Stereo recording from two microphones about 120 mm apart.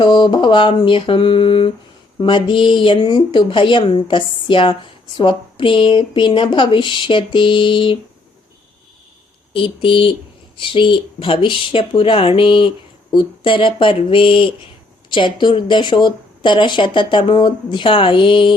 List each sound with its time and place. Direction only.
0.0 s speech: 40° left (ahead or behind)
9.5 s speech: 45° left (ahead or behind)